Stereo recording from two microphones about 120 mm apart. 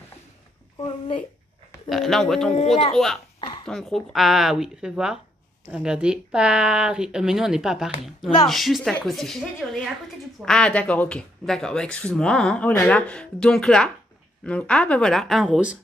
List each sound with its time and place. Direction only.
1.9 s speech: centre (ahead or behind)
3.3 s a sound: 40° left (ahead or behind)
3.6 s a woman's voice: 5° left (ahead or behind)